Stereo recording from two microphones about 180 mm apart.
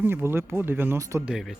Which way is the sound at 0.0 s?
10° right (ahead or behind).